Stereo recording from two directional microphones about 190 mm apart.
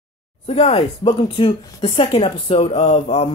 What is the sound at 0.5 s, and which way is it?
Speech, 35° left (ahead or behind).